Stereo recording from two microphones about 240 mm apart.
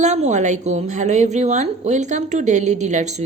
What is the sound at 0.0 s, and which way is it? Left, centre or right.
A woman's voice, right.